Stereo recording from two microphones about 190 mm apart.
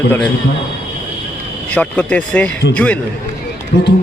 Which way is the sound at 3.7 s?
60° left (ahead or behind).